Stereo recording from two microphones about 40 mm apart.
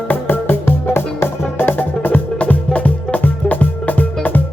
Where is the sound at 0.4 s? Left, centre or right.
Left.